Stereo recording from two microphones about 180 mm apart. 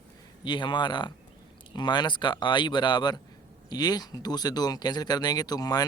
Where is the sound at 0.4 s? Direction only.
25° left (ahead or behind).